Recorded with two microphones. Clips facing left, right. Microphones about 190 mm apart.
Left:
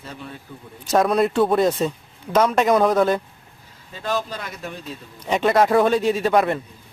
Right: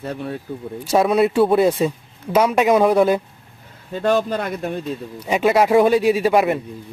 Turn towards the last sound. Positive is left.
turn(degrees=-10)  # may be behind; listen again after turning